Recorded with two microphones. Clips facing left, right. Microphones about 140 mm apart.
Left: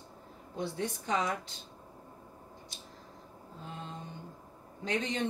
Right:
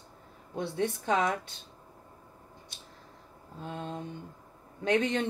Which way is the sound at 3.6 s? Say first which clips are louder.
Right 6 dB; 65° right (ahead or behind).